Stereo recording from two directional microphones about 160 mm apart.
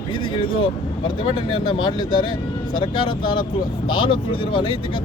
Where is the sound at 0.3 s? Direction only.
30° left (ahead or behind).